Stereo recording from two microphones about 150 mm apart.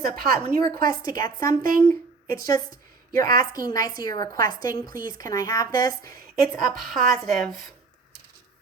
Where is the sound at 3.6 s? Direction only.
25° left (ahead or behind).